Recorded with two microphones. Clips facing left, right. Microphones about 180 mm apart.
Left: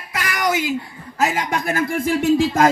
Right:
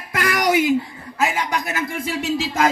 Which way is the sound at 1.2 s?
45° left (ahead or behind).